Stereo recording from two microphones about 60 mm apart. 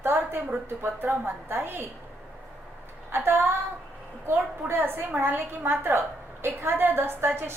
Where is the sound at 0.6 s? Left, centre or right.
Right.